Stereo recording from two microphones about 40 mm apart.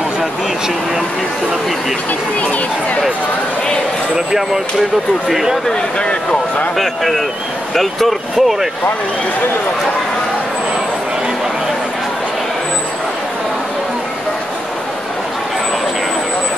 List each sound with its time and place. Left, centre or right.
4.1 s speech: centre
5.7 s speech: left
6.8 s speech: centre